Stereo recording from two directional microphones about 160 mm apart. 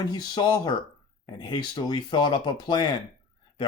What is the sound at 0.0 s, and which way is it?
Speech, 25° left (ahead or behind).